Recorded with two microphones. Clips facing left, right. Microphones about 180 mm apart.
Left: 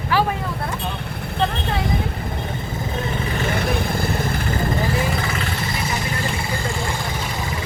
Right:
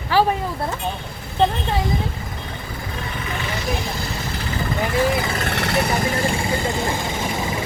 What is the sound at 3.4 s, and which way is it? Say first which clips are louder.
Vehicle: left 3 dB; 55° left (ahead or behind).